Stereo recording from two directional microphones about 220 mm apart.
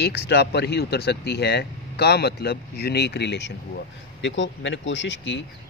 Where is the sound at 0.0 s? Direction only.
45° left (ahead or behind).